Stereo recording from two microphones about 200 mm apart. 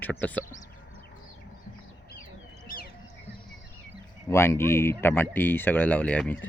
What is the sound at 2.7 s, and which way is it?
Bird, 45° left (ahead or behind).